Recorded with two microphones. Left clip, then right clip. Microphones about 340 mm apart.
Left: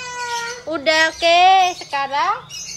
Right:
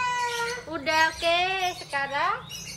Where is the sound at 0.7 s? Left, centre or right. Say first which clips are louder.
Left 8 dB; centre.